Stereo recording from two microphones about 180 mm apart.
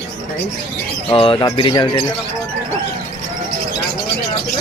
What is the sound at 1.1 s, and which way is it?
Speech, 25° left (ahead or behind).